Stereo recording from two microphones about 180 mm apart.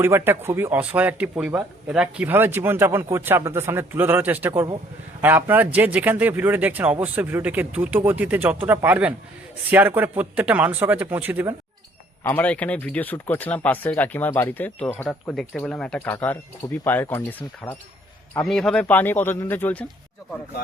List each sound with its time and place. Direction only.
0.0 s speech: 15° right (ahead or behind)
12.2 s speech: 10° left (ahead or behind)